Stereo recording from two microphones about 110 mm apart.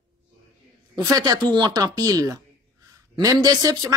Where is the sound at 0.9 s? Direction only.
35° right (ahead or behind).